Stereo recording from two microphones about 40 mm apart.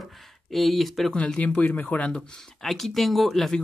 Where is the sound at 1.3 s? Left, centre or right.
Left.